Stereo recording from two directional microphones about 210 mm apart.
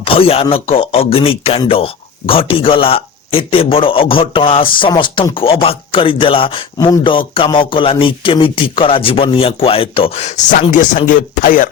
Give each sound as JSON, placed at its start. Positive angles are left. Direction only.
{"t": 0.0, "sound": "speech", "side_deg": 25}